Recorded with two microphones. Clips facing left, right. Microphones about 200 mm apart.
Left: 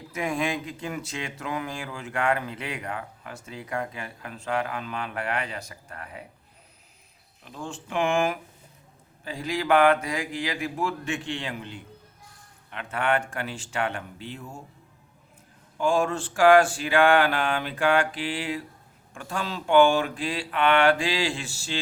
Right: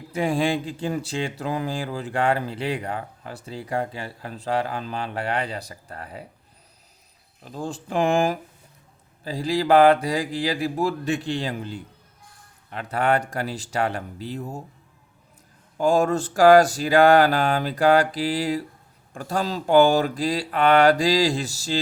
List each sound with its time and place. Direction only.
0.1 s speech: 30° right (ahead or behind)
7.4 s speech: 35° right (ahead or behind)
15.8 s speech: 40° right (ahead or behind)